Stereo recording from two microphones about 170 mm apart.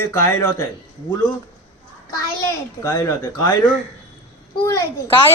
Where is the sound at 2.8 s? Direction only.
20° left (ahead or behind).